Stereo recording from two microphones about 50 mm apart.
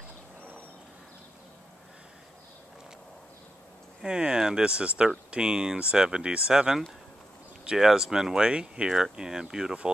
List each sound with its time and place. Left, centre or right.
4.0 s speech: centre